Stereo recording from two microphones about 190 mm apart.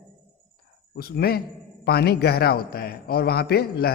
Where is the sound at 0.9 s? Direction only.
55° left (ahead or behind).